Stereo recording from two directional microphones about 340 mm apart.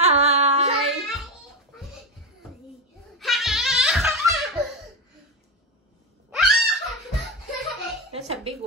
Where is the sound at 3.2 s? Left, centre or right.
Centre.